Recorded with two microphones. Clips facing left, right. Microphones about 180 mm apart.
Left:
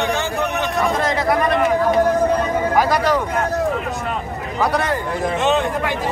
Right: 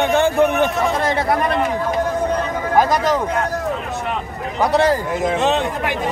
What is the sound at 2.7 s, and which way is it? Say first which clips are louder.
Speech: right 3 dB; 20° right (ahead or behind).